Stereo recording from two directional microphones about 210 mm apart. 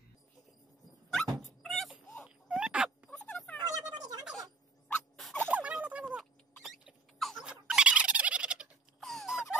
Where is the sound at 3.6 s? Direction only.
20° right (ahead or behind).